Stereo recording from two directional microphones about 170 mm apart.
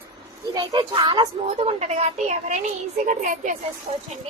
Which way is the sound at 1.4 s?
40° right (ahead or behind).